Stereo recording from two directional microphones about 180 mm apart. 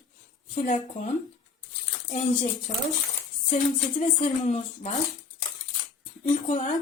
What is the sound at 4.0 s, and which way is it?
Speech, 35° left (ahead or behind).